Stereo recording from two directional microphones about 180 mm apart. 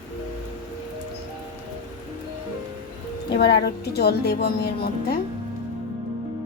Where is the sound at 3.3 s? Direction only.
65° left (ahead or behind).